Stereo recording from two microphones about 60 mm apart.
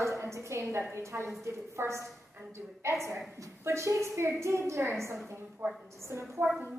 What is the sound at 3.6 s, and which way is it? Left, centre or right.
A woman's voice, right.